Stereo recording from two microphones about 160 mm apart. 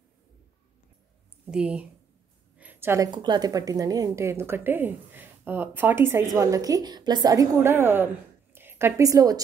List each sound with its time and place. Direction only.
1.4 s speech: 5° right (ahead or behind)
2.5 s a sound: 10° right (ahead or behind)
3.1 s a woman's voice: 25° right (ahead or behind)